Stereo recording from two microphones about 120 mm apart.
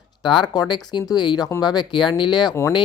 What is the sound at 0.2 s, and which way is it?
Speech, 40° left (ahead or behind).